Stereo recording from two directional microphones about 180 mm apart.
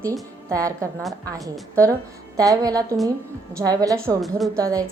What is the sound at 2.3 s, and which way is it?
A woman's voice, 20° right (ahead or behind).